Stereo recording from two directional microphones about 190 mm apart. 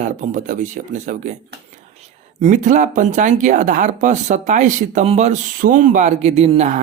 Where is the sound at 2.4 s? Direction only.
40° right (ahead or behind).